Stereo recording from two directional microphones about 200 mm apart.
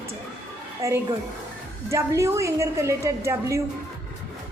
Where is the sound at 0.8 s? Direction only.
15° right (ahead or behind).